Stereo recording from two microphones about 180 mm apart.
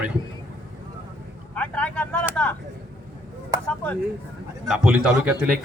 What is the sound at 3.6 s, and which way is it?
Speech, 10° left (ahead or behind).